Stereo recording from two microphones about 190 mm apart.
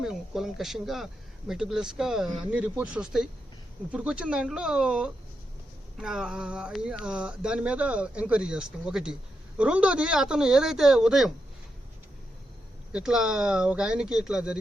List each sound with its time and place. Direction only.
0.0 s speech: centre (ahead or behind)
12.9 s speech: 5° right (ahead or behind)